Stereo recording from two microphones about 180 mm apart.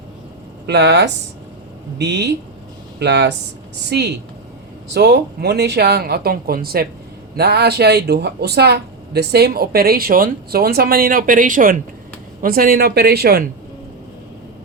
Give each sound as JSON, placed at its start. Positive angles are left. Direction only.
{"t": 0.7, "sound": "speech", "side_deg": -70}